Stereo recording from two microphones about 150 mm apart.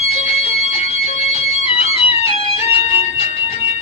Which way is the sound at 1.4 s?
40° left (ahead or behind).